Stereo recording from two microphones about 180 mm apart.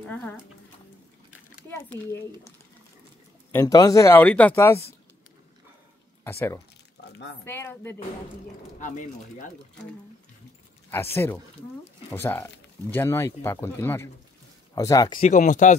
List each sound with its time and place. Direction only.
0.1 s speech: 10° left (ahead or behind)
1.7 s speech: 15° left (ahead or behind)
3.5 s speech: 20° left (ahead or behind)
6.2 s speech: 10° left (ahead or behind)
7.0 s a sound: 75° left (ahead or behind)
7.4 s speech: 15° left (ahead or behind)
8.7 s speech: 45° left (ahead or behind)
10.9 s speech: 10° left (ahead or behind)
15.2 s speech: 45° left (ahead or behind)